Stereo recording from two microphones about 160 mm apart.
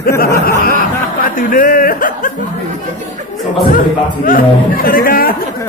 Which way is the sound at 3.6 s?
65° left (ahead or behind).